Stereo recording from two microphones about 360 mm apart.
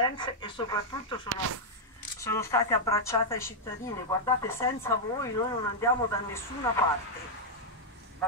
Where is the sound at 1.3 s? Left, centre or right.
Right.